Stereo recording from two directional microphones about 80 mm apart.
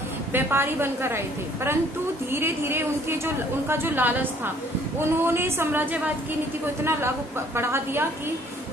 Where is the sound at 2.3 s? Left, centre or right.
Right.